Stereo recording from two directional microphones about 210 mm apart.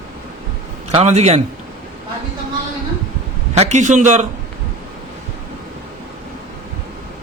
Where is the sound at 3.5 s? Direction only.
30° right (ahead or behind).